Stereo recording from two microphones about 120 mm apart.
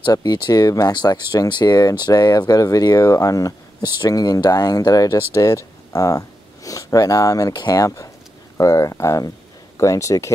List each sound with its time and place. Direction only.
0.0 s speech: 35° left (ahead or behind)